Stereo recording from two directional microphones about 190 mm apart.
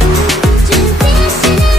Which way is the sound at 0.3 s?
Centre (ahead or behind).